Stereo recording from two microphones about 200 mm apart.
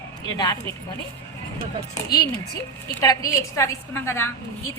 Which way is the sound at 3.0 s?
15° left (ahead or behind).